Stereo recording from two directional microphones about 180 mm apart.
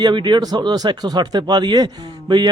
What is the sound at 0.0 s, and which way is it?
Speech, 25° right (ahead or behind).